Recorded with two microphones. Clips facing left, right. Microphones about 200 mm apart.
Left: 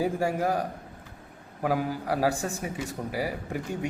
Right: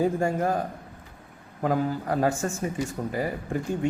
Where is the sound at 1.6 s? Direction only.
5° left (ahead or behind).